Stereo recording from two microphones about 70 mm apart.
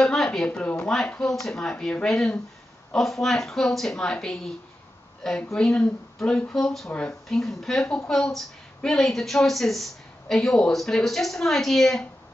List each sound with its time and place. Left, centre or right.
0.0 s a sound: centre
0.5 s speech: left
5.5 s a woman's voice: centre
6.9 s speech: centre
7.2 s a woman's voice: centre